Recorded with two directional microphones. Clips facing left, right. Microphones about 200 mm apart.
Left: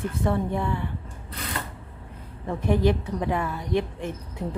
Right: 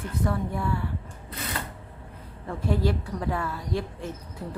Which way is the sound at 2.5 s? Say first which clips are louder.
Left 4 dB; 20° left (ahead or behind).